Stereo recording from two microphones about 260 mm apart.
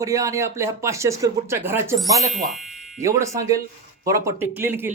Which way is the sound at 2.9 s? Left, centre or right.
Centre.